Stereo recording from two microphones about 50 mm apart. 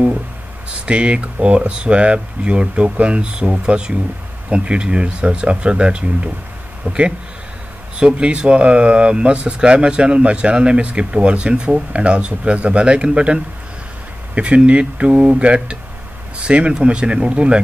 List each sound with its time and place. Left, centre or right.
0.7 s speech: right